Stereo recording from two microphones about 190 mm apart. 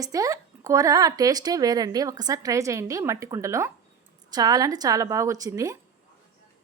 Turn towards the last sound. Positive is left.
turn(degrees=-15)  # may be behind; listen again after turning